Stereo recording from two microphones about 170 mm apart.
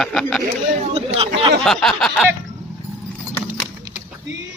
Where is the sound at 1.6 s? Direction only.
Centre (ahead or behind).